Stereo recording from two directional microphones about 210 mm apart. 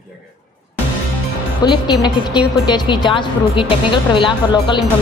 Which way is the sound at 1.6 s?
20° left (ahead or behind).